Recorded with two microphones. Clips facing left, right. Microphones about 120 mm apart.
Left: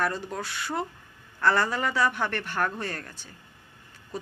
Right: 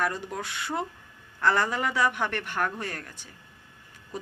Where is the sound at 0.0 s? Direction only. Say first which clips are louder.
Left 1 dB; 15° right (ahead or behind).